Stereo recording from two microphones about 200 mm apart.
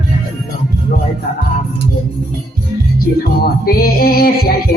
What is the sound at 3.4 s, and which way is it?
Music, 50° left (ahead or behind).